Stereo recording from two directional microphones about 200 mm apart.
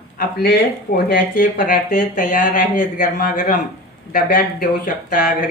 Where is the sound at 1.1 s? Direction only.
50° left (ahead or behind).